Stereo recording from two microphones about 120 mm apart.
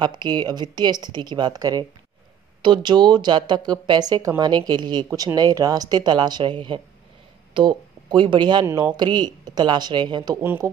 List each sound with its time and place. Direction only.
0.0 s speech: 40° right (ahead or behind)
10.4 s speech: 20° right (ahead or behind)